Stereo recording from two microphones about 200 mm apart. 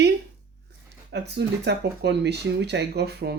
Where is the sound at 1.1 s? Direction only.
55° right (ahead or behind).